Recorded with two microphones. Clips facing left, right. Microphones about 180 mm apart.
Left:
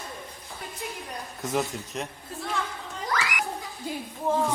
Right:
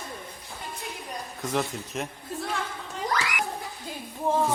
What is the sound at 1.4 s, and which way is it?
Speech, centre (ahead or behind).